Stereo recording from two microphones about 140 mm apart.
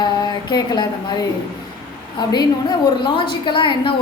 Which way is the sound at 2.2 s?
30° left (ahead or behind).